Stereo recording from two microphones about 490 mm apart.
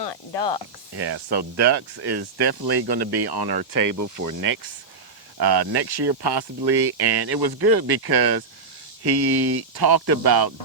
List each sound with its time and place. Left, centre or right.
0.0 s speech: left
0.9 s speech: right